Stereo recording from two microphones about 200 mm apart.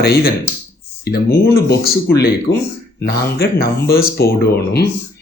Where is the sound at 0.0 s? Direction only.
50° left (ahead or behind).